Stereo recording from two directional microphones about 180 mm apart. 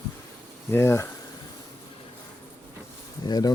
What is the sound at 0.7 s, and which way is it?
Speech, 15° left (ahead or behind).